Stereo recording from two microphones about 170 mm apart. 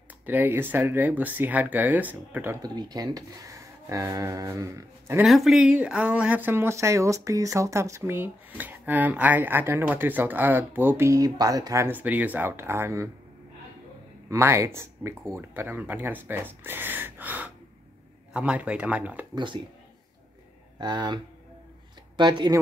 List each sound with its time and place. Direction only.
0.3 s speech: 10° right (ahead or behind)
2.6 s speech: 25° right (ahead or behind)
5.2 s speech: centre (ahead or behind)
14.3 s speech: 15° right (ahead or behind)
19.3 s speech: 30° right (ahead or behind)
20.8 s speech: 25° right (ahead or behind)